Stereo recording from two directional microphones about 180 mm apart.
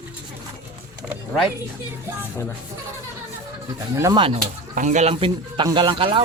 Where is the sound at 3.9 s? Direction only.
15° right (ahead or behind).